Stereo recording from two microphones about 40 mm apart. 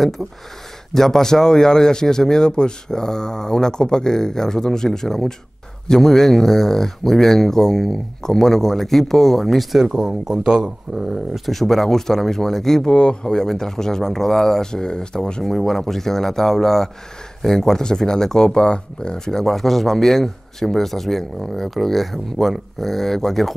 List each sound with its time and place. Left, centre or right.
0.9 s speech: centre
9.8 s speech: centre
10.6 s speech: centre
12.9 s speech: left
15.4 s speech: centre